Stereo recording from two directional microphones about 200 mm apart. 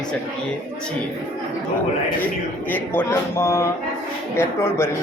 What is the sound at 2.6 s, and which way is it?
Speech, 10° left (ahead or behind).